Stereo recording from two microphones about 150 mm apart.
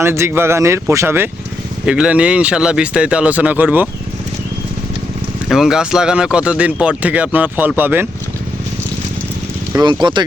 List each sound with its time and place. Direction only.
0.0 s speech: 15° right (ahead or behind)
5.5 s speech: 5° right (ahead or behind)
9.7 s speech: 30° right (ahead or behind)